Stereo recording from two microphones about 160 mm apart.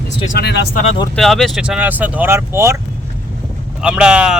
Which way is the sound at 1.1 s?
Centre (ahead or behind).